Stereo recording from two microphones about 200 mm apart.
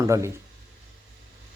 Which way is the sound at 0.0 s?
15° right (ahead or behind).